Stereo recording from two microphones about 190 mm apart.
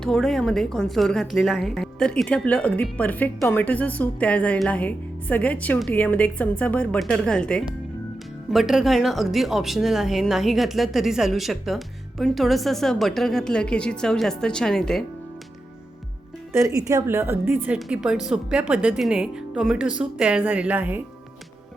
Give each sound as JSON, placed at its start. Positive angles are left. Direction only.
{"t": 0.0, "sound": "a woman's voice", "side_deg": 0}
{"t": 16.5, "sound": "a woman's voice", "side_deg": -15}